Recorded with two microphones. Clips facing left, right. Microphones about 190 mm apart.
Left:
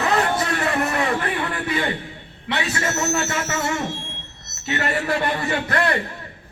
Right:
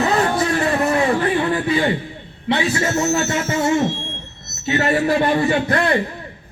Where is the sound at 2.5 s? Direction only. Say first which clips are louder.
Right 6 dB; 25° right (ahead or behind).